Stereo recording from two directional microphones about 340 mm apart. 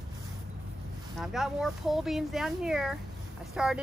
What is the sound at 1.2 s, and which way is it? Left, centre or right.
Speech, centre.